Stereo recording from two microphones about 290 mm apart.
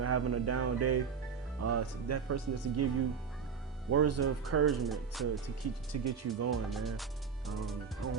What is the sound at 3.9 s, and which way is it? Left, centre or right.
Speech, right.